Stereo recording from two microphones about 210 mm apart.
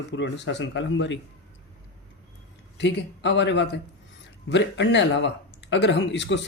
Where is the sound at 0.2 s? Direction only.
60° left (ahead or behind).